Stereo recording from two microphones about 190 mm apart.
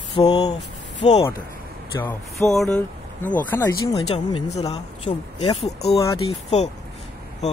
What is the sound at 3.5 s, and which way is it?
Speech, 15° left (ahead or behind).